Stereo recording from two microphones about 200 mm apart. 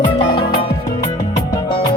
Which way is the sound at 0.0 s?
25° left (ahead or behind).